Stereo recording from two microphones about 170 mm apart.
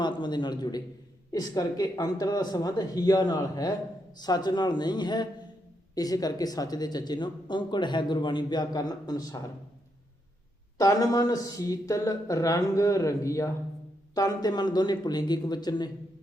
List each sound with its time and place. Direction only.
0.0 s speech: 25° left (ahead or behind)
10.8 s speech: 20° left (ahead or behind)